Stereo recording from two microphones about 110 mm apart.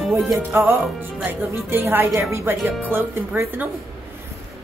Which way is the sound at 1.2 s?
20° right (ahead or behind).